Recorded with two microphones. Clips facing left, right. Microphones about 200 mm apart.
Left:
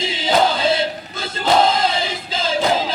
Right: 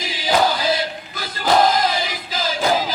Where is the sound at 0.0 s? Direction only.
25° left (ahead or behind).